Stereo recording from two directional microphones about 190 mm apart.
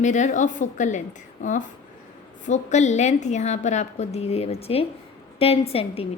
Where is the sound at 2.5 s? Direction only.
35° left (ahead or behind).